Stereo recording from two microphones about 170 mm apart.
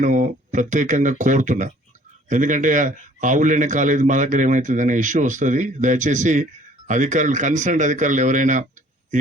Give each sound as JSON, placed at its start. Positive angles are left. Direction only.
{"t": 0.0, "sound": "a man's voice", "side_deg": -50}